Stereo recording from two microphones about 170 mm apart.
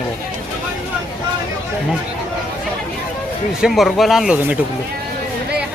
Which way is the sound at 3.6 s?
Centre (ahead or behind).